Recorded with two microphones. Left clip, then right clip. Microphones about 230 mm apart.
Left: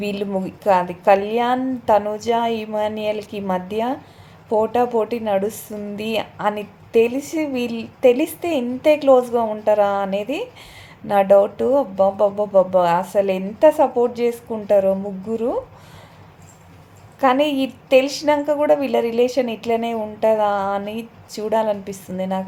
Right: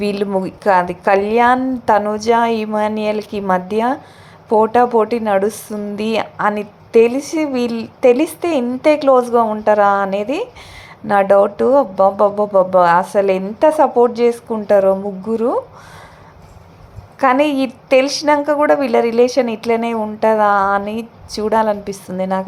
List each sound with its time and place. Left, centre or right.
0.0 s a woman's voice: centre
17.2 s a woman's voice: centre